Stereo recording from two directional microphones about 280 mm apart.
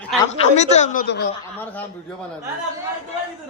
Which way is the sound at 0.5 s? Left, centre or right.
Left.